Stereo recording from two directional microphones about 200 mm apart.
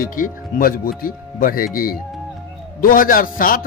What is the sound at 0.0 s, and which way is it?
A man's voice, 45° left (ahead or behind).